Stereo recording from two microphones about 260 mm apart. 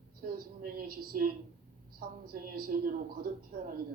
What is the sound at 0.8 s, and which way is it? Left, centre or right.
Speech, right.